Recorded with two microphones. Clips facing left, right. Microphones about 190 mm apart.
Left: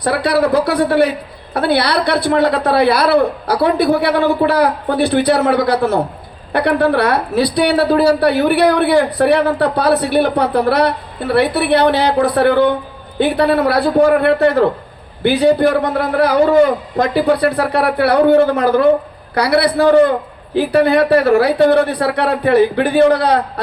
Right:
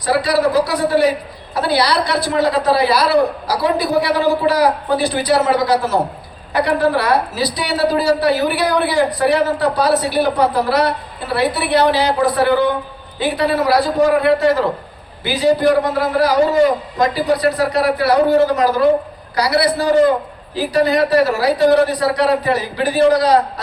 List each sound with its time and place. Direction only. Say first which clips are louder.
0.0 s a woman's voice: left 1 dB; 60° left (ahead or behind)